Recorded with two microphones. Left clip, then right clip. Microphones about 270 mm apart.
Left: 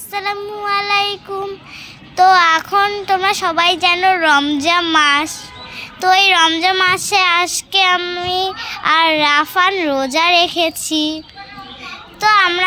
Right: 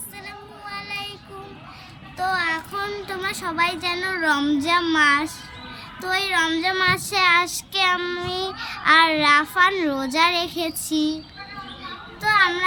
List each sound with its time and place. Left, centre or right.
0.1 s child singing: centre
2.3 s child singing: centre
12.2 s child singing: centre